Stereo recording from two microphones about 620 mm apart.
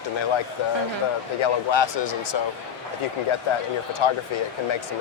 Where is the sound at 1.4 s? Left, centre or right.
Left.